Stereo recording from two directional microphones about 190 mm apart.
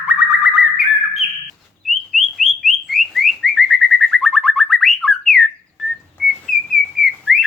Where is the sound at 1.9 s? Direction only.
Centre (ahead or behind).